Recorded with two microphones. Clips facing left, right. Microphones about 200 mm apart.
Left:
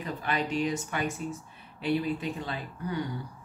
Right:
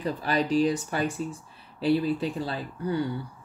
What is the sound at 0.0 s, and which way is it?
Speech, 35° right (ahead or behind).